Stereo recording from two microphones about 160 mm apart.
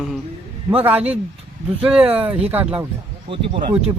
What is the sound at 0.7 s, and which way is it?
Speech, 10° right (ahead or behind).